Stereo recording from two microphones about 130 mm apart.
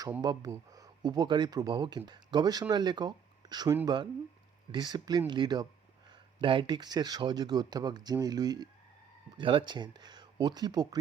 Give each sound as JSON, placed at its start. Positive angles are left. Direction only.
{"t": 0.2, "sound": "speech", "side_deg": -30}